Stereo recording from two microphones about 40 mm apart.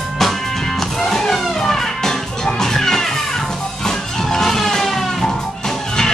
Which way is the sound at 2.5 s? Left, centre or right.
Centre.